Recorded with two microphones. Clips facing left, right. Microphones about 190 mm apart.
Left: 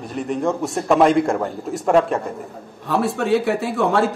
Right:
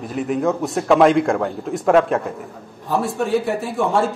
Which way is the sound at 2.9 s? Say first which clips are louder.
Left 1 dB; 70° left (ahead or behind).